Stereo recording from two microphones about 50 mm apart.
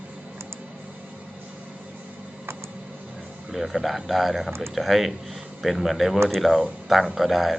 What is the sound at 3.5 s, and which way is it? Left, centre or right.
Speech, centre.